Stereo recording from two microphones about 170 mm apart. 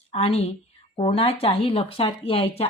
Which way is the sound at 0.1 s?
35° left (ahead or behind).